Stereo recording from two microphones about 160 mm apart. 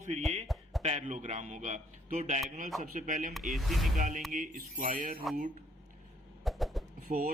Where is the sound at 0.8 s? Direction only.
45° right (ahead or behind).